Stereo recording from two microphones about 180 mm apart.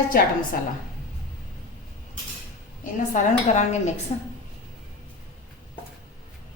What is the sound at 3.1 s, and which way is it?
Speech, 40° left (ahead or behind).